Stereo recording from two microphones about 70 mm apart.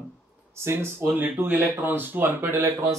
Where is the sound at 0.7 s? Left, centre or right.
Right.